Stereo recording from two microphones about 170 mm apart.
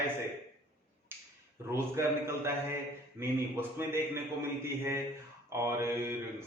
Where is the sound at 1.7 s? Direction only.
15° right (ahead or behind).